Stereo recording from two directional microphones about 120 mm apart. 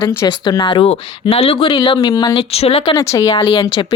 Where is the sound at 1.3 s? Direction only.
55° left (ahead or behind).